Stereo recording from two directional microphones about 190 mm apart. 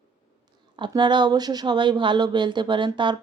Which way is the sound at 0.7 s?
25° right (ahead or behind).